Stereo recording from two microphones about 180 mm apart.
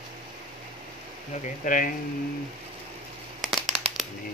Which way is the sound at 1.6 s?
50° left (ahead or behind).